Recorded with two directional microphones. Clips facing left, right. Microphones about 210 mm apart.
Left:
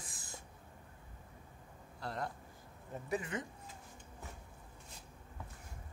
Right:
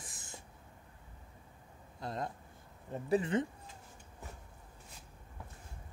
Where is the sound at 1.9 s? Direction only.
20° right (ahead or behind).